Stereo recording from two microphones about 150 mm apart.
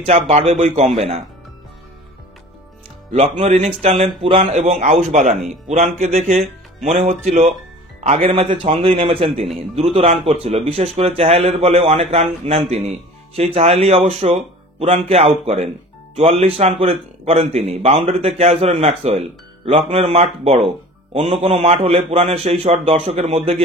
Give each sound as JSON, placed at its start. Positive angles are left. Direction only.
{"t": 0.0, "sound": "a man's voice", "side_deg": -45}
{"t": 3.1, "sound": "a man's voice", "side_deg": -50}
{"t": 4.6, "sound": "a man's voice", "side_deg": -50}